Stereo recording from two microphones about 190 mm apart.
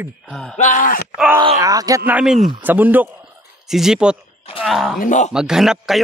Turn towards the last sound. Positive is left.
turn(degrees=0)  # may be behind; listen again after turning